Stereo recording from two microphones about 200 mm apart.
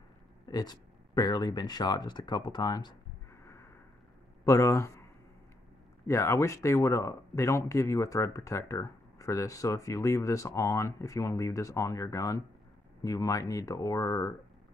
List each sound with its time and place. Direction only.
0.5 s speech: 20° left (ahead or behind)
3.4 s a sound: 15° left (ahead or behind)
4.5 s speech: 15° left (ahead or behind)
6.0 s speech: 15° left (ahead or behind)